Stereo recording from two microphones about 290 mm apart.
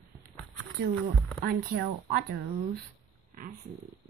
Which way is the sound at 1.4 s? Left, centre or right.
Right.